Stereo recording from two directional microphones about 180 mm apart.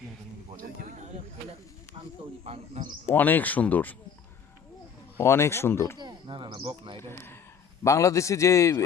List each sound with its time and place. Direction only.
0.8 s a sound: 50° right (ahead or behind)
2.4 s speech: 35° right (ahead or behind)
3.1 s a man's voice: 10° left (ahead or behind)
5.1 s a man's voice: 15° left (ahead or behind)
6.0 s a sound: 25° right (ahead or behind)
7.0 s a man's voice: 15° left (ahead or behind)